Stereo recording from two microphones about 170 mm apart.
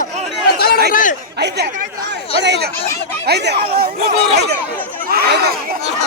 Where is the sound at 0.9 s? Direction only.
55° left (ahead or behind).